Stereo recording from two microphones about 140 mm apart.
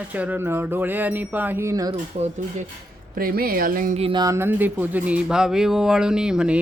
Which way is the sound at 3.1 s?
90° right.